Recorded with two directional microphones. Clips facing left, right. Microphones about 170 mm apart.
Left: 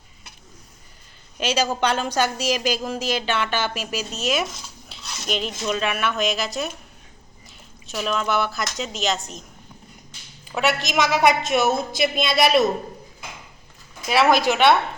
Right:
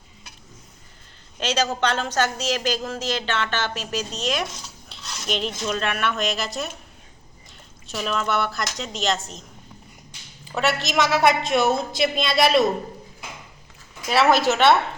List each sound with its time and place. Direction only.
1.4 s a woman's voice: 10° left (ahead or behind)
7.9 s a woman's voice: centre (ahead or behind)
10.5 s a woman's voice: centre (ahead or behind)
14.1 s a woman's voice: 10° left (ahead or behind)